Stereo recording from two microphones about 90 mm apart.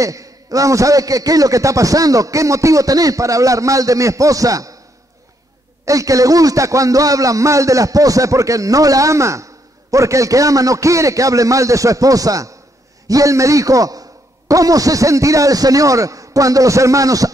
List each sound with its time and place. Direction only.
0.0 s a man's voice: 40° right (ahead or behind)
5.9 s a man's voice: 40° right (ahead or behind)